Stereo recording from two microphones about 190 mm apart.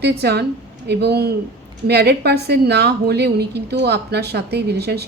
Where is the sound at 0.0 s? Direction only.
60° right (ahead or behind).